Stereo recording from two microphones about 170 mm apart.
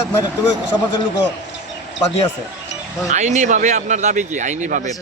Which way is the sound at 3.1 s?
45° right (ahead or behind).